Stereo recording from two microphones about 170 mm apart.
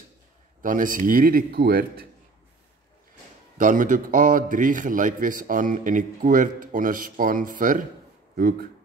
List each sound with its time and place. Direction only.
0.6 s speech: 50° right (ahead or behind)
3.5 s a man's voice: 50° right (ahead or behind)